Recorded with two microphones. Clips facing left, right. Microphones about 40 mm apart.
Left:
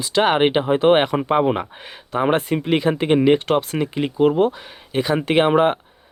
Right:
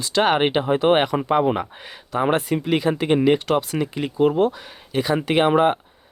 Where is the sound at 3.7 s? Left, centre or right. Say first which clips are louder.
Left 2 dB; left.